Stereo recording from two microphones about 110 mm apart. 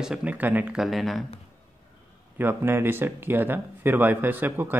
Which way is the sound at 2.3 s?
20° right (ahead or behind).